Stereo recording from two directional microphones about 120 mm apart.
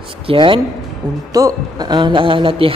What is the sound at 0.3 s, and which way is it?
Speech, 45° right (ahead or behind).